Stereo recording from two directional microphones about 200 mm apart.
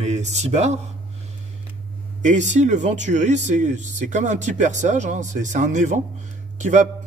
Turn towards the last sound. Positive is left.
turn(degrees=-35)  # may be behind; listen again after turning